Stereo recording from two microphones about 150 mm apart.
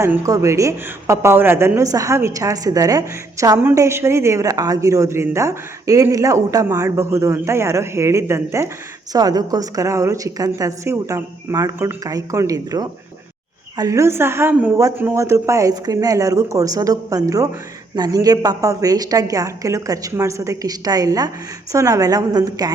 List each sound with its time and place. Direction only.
0.0 s a woman's voice: 20° right (ahead or behind)